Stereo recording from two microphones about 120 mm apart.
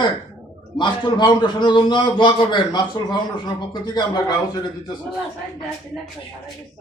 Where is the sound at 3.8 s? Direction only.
35° left (ahead or behind).